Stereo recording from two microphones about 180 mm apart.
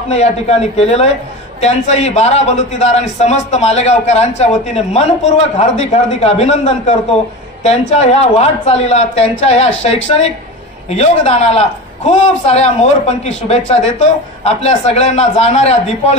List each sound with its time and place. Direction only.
0.1 s a man's voice: 35° left (ahead or behind)